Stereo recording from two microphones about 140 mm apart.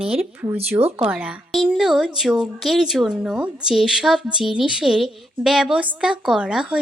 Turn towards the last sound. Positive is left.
turn(degrees=-5)  # may be behind; listen again after turning